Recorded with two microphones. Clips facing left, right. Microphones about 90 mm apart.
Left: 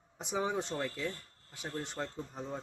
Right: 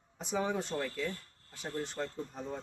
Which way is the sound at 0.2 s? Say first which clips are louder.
Even; 15° left (ahead or behind).